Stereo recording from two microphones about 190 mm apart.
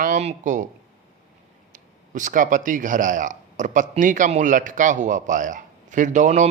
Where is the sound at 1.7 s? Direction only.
45° right (ahead or behind).